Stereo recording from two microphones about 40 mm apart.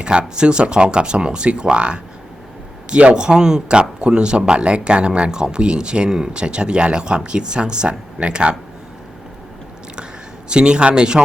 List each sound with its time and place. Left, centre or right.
0.0 s a man's voice: right
3.2 s speech: centre
10.5 s speech: right